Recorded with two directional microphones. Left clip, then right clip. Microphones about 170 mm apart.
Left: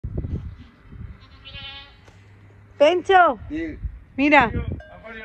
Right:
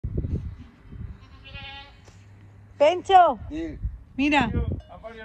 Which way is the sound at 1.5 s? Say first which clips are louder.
Left 3 dB; 55° right (ahead or behind).